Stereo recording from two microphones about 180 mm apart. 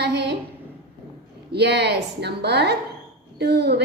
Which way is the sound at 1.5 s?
65° right (ahead or behind).